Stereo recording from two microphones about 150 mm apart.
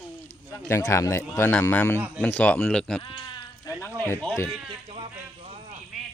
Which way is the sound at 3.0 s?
35° left (ahead or behind).